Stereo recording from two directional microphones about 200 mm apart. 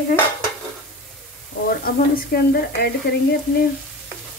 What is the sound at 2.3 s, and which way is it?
Frying, 50° left (ahead or behind).